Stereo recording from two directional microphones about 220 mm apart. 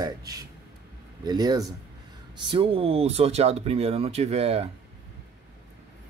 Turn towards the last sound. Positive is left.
turn(degrees=-25)  # may be behind; listen again after turning